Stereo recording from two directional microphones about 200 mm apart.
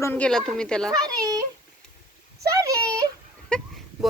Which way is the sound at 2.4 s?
15° right (ahead or behind).